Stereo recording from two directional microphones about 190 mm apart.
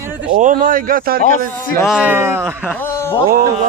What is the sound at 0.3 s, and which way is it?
Speech, 45° right (ahead or behind).